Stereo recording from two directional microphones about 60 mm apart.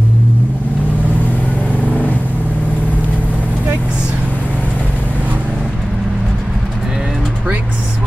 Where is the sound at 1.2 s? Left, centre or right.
Left.